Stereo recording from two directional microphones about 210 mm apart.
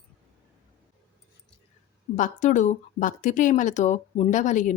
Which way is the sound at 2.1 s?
35° left (ahead or behind).